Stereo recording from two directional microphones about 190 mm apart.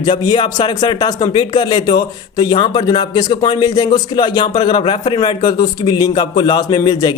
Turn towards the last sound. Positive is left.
turn(degrees=20)  # may be behind; listen again after turning